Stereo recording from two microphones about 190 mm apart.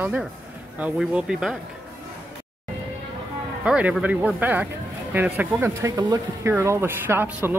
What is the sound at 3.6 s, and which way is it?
Speech, 5° right (ahead or behind).